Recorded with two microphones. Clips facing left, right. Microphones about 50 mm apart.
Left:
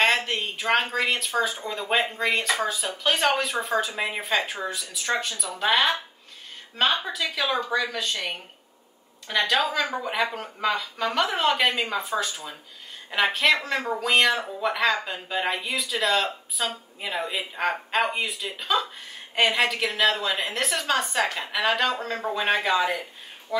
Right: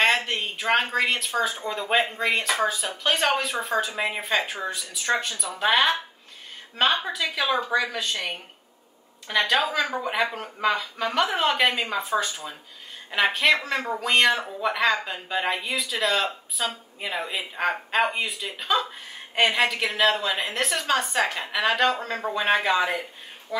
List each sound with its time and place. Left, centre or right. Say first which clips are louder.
0.0 s speech: even; centre
7.1 s speech: right 1 dB; centre